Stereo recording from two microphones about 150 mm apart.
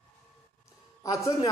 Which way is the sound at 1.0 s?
20° left (ahead or behind).